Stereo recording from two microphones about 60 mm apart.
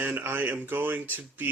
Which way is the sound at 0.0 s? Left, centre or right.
Right.